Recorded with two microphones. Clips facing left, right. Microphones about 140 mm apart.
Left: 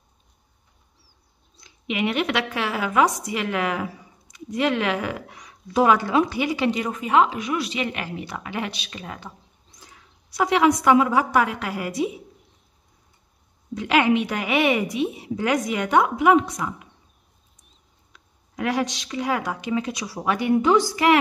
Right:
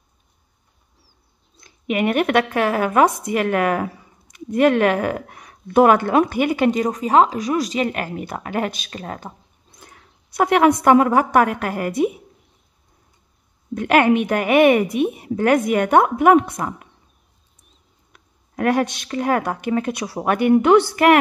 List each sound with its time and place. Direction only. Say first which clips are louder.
1.6 s speech: right 5 dB; 50° right (ahead or behind)
13.7 s speech: right 4 dB; 55° right (ahead or behind)
18.1 s speech: right 5 dB; 55° right (ahead or behind)